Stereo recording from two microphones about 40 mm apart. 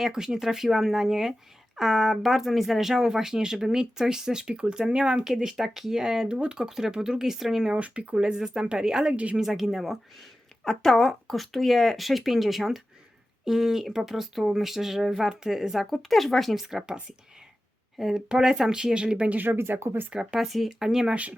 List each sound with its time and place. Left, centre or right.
0.0 s speech: centre
6.7 s speech: centre
7.8 s a woman's voice: right
8.1 s speech: centre
9.0 s a woman's voice: right
9.4 s speech: centre
10.6 s speech: centre
16.6 s speech: centre
19.3 s speech: right
19.5 s speech: right
20.1 s speech: centre